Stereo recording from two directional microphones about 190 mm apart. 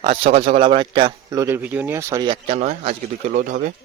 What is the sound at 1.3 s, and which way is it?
Speech, 15° right (ahead or behind).